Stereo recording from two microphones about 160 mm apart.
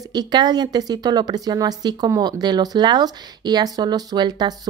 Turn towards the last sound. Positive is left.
turn(degrees=-25)  # may be behind; listen again after turning